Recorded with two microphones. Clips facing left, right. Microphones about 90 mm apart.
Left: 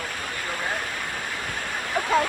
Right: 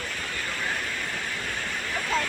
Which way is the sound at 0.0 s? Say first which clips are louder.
Left 2 dB; 50° left (ahead or behind).